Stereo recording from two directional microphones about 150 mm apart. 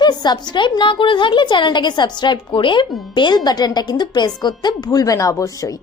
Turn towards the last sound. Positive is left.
turn(degrees=20)  # may be behind; listen again after turning